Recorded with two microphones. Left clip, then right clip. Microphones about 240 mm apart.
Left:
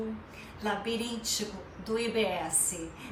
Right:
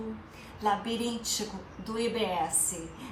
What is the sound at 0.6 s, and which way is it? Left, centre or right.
Speech, centre.